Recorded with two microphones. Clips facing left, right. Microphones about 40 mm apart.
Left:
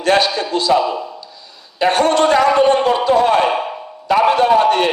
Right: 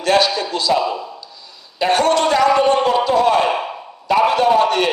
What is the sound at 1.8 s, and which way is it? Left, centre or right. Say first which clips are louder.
A man's voice: left 2 dB; left.